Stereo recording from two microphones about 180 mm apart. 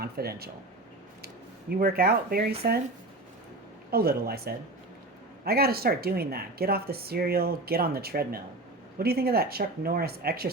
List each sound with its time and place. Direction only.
0.0 s speech: 60° right (ahead or behind)
1.7 s speech: 55° right (ahead or behind)
3.9 s speech: 60° right (ahead or behind)